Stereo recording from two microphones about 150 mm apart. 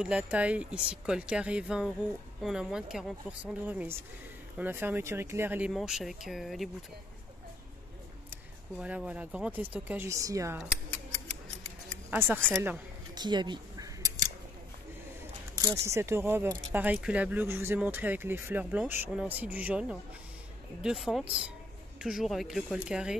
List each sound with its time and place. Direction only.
0.0 s speech: 10° right (ahead or behind)
5.7 s speech: centre (ahead or behind)
8.8 s speech: 10° right (ahead or behind)
12.1 s speech: 15° right (ahead or behind)
13.1 s a sound: 30° right (ahead or behind)
15.5 s speech: 25° right (ahead or behind); by 23.1 s 5° right (ahead or behind)